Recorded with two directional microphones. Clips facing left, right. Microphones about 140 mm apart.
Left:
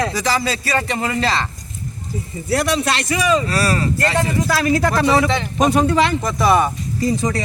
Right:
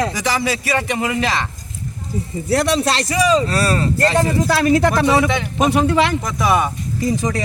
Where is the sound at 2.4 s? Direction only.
30° right (ahead or behind); by 7.1 s 15° right (ahead or behind).